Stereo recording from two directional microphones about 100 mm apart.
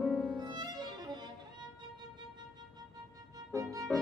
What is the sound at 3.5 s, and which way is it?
Music, 35° right (ahead or behind).